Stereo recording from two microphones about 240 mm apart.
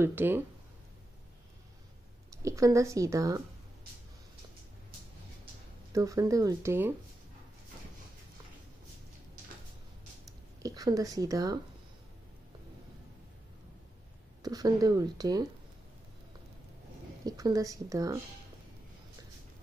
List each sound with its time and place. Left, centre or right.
0.0 s speech: centre
2.4 s speech: centre
5.9 s speech: centre
10.6 s speech: centre
14.4 s speech: centre
17.2 s speech: centre